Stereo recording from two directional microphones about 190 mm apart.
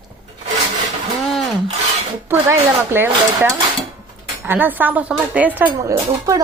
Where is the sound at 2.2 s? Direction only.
10° right (ahead or behind).